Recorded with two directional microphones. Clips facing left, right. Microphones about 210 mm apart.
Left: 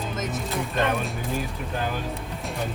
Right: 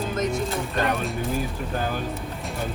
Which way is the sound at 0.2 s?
Centre (ahead or behind).